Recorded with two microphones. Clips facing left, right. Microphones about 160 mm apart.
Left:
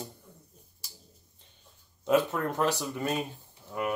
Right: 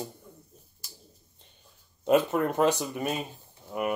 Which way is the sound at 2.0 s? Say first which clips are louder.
Right 3 dB; 20° right (ahead or behind).